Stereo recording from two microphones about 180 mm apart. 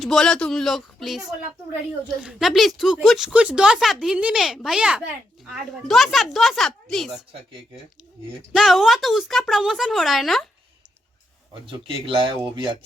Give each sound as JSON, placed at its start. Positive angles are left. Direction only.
{"t": 0.0, "sound": "speech", "side_deg": 0}
{"t": 8.5, "sound": "speech", "side_deg": 0}
{"t": 11.6, "sound": "speech", "side_deg": -30}